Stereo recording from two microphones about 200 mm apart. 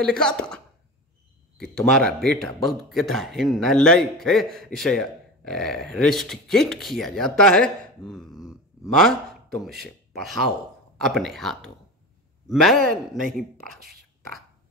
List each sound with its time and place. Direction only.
0.0 s a man's voice: 5° left (ahead or behind)
1.6 s a man's voice: 5° left (ahead or behind)